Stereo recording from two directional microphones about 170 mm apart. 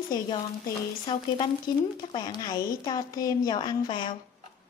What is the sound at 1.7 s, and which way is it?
A woman's voice, 25° left (ahead or behind).